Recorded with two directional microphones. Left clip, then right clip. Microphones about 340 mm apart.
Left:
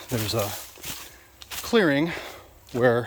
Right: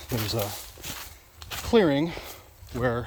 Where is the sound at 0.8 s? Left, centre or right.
Centre.